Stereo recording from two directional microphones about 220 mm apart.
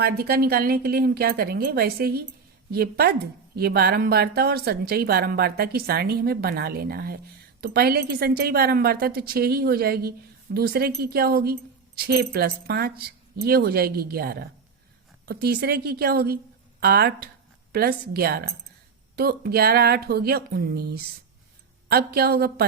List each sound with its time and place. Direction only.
0.0 s speech: 45° right (ahead or behind)